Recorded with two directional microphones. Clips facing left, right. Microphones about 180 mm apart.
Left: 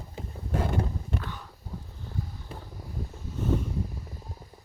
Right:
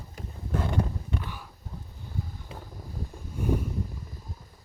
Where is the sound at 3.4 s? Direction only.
10° right (ahead or behind).